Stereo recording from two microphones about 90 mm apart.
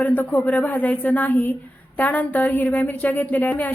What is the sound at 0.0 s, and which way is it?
A man's voice, 15° left (ahead or behind).